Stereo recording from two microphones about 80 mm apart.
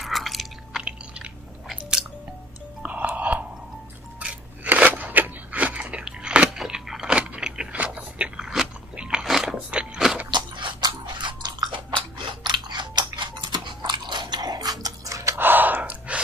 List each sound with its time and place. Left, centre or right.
0.0 s biting: centre
0.8 s chewing: centre
2.8 s music: centre
4.2 s crunch: centre
6.6 s vehicle: centre
9.7 s a sound: centre
10.3 s a sound: right
10.8 s chewing: right
12.4 s biting: right
15.3 s gasp: right